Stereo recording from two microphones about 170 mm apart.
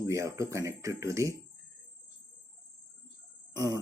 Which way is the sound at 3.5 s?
20° right (ahead or behind).